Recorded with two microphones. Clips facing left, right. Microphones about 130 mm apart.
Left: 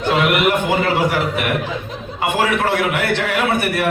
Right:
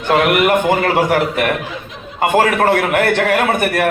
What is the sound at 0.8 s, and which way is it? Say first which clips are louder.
A man's voice: right 3 dB; 50° right (ahead or behind).